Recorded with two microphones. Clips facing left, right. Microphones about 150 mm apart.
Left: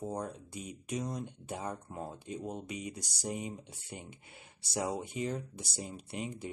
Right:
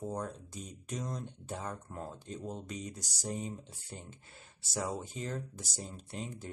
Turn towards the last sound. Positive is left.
turn(degrees=10)  # may be behind; listen again after turning